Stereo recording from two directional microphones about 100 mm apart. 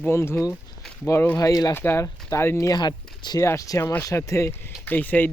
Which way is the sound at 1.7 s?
25° left (ahead or behind).